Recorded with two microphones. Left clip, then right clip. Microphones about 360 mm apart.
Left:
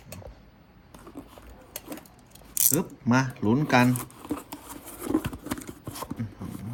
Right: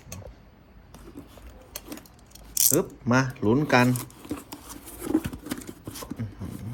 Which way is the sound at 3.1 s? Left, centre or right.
Centre.